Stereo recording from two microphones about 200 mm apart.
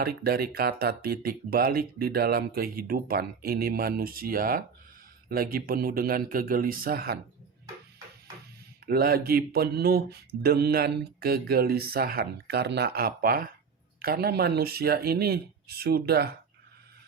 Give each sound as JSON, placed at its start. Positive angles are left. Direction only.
{"t": 0.0, "sound": "mantra", "side_deg": -50}
{"t": 8.9, "sound": "mantra", "side_deg": -50}